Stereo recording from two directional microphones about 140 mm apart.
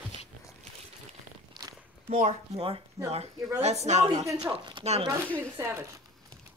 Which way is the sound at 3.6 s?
55° right (ahead or behind).